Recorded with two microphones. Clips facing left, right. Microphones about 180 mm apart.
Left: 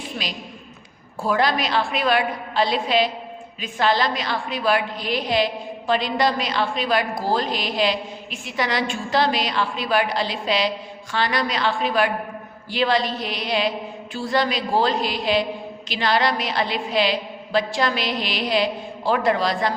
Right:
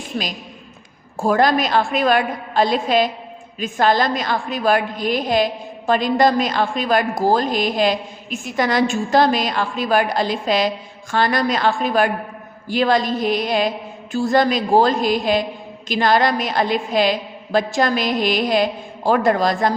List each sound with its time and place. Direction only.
0.1 s a woman's voice: 40° right (ahead or behind)